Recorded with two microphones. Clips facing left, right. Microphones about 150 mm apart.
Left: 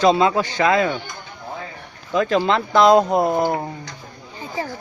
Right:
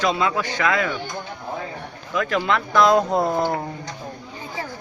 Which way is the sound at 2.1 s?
25° left (ahead or behind).